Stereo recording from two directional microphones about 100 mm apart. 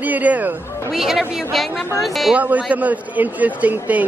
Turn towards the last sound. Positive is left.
turn(degrees=-15)  # may be behind; listen again after turning